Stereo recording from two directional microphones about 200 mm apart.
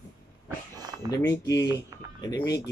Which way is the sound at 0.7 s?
20° right (ahead or behind).